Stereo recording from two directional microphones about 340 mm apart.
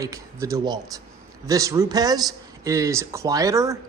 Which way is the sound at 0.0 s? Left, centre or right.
Centre.